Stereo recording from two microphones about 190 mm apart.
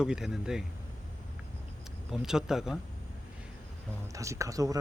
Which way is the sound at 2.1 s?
5° right (ahead or behind).